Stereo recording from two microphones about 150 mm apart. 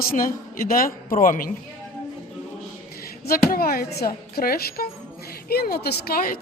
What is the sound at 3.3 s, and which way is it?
A woman's voice, 85° left.